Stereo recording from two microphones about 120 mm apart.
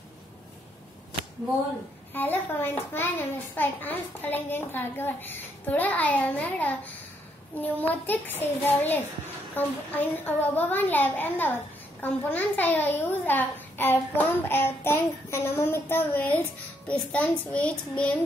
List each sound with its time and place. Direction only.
2.1 s a child's voice: 15° left (ahead or behind)